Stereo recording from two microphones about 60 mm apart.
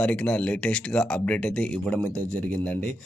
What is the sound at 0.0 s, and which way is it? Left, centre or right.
A man's voice, left.